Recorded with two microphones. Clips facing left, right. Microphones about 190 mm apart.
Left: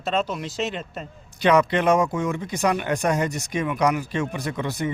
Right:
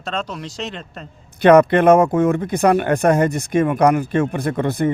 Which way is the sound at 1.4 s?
55° right (ahead or behind).